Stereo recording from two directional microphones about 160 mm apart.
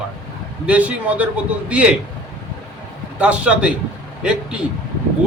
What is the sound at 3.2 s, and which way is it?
A man's voice, 5° right (ahead or behind).